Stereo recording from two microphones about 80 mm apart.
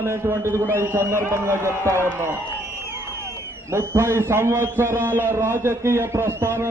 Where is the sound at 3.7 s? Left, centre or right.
Right.